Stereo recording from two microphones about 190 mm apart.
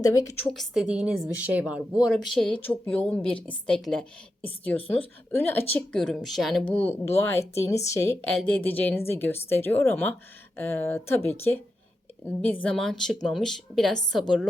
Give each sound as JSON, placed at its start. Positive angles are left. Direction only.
{"t": 0.0, "sound": "a woman's voice", "side_deg": 15}
{"t": 0.5, "sound": "a woman's voice", "side_deg": 0}